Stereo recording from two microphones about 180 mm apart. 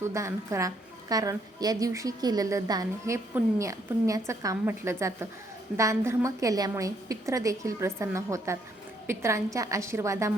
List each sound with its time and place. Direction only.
0.0 s a woman's voice: 15° right (ahead or behind)